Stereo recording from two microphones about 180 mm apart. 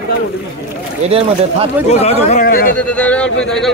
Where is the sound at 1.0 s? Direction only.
30° right (ahead or behind).